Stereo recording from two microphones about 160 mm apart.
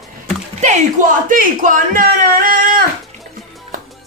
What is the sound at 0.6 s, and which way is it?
Speech, 50° right (ahead or behind).